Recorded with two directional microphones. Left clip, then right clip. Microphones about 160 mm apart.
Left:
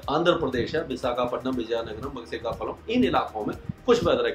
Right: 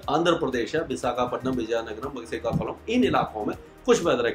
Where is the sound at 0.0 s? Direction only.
15° right (ahead or behind).